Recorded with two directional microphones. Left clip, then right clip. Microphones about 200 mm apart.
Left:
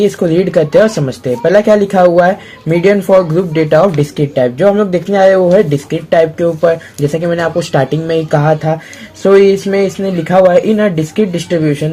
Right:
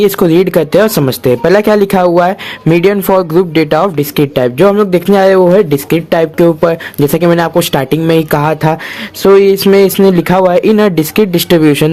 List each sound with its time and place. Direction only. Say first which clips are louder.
0.0 s speech: right 3 dB; 40° right (ahead or behind)